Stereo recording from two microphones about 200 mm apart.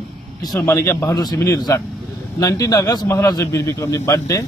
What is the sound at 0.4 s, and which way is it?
A man's voice, 15° left (ahead or behind).